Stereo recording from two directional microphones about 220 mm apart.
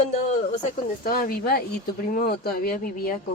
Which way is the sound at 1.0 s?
40° left (ahead or behind).